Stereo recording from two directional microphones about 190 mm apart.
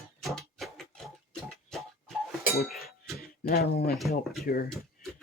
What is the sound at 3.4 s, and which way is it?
Speech, 55° left (ahead or behind).